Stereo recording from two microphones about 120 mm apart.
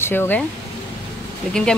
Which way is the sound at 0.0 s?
20° left (ahead or behind).